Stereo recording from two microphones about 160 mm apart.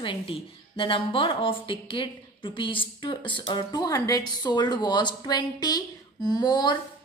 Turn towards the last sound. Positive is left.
turn(degrees=25)  # may be behind; listen again after turning